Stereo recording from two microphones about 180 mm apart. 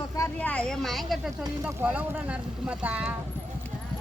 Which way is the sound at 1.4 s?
15° right (ahead or behind).